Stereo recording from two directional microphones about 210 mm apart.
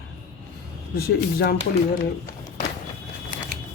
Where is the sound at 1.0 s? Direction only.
45° left (ahead or behind).